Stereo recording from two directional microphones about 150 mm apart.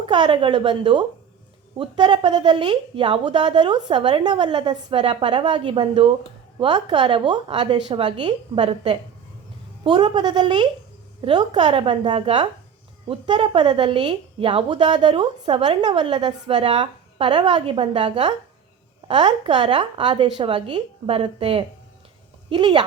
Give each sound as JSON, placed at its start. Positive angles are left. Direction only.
{"t": 0.0, "sound": "a woman's voice", "side_deg": -30}
{"t": 11.5, "sound": "a woman's voice", "side_deg": -45}
{"t": 16.6, "sound": "a woman's voice", "side_deg": -50}
{"t": 16.8, "sound": "a woman's voice", "side_deg": -30}